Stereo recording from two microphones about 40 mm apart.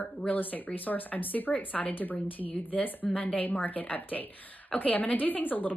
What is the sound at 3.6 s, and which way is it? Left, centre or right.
A woman's voice, left.